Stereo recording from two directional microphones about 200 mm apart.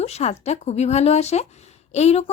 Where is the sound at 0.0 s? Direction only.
30° left (ahead or behind).